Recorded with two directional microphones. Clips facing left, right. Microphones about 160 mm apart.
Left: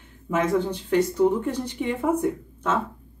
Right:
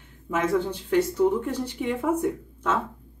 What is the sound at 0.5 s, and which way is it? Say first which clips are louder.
Speech: left 1 dB; 10° left (ahead or behind).